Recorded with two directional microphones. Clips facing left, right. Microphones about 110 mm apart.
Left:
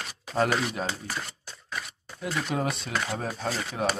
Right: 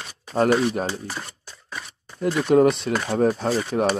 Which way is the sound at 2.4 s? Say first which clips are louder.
Right 17 dB; 45° right (ahead or behind).